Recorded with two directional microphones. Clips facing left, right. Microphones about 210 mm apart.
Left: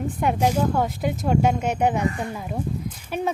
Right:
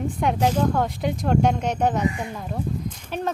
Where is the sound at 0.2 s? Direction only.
5° left (ahead or behind).